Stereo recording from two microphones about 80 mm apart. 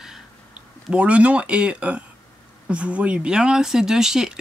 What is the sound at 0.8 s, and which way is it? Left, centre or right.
Speech, centre.